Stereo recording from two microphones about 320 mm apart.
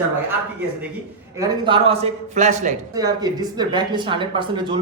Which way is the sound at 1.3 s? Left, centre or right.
Centre.